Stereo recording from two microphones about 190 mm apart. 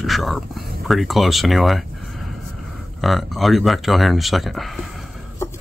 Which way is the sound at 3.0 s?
Centre (ahead or behind).